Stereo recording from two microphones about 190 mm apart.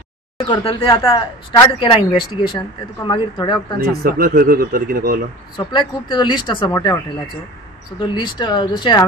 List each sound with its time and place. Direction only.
0.4 s speech: 25° left (ahead or behind)
3.7 s speech: 50° right (ahead or behind)
5.7 s speech: 25° left (ahead or behind)
8.0 s speech: 25° left (ahead or behind)